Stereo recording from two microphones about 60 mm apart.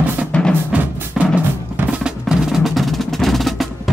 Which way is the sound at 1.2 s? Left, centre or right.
Centre.